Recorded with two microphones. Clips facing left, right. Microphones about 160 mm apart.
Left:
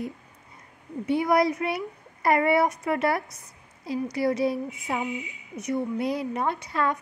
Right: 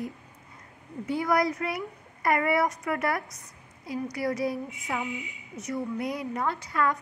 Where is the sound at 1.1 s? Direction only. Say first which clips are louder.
Left 4 dB; 25° left (ahead or behind).